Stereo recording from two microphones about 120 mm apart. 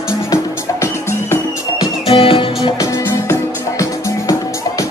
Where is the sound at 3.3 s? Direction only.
25° left (ahead or behind).